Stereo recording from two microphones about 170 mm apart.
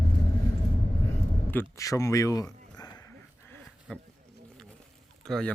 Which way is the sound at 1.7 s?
20° left (ahead or behind).